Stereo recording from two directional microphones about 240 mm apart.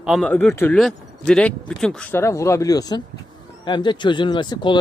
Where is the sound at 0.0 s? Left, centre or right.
Centre.